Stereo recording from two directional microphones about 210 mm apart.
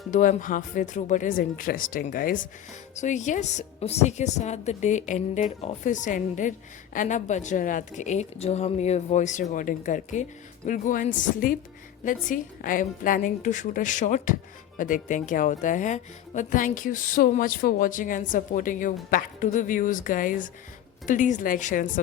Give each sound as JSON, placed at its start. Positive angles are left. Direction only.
{"t": 0.1, "sound": "speech", "side_deg": 40}